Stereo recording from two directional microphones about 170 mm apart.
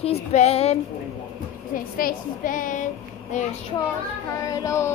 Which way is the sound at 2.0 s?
55° left (ahead or behind).